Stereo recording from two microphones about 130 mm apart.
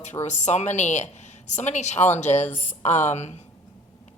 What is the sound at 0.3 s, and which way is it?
A woman's voice, 65° left (ahead or behind).